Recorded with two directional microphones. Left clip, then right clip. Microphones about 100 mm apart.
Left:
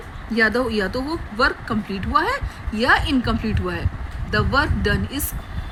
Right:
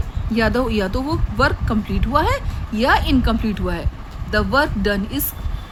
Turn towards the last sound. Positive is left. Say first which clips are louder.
# right 2 dB
turn(degrees=-35)  # may be behind; listen again after turning